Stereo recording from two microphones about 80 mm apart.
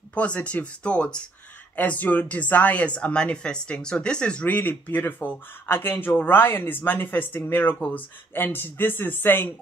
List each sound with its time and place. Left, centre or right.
0.1 s speech: centre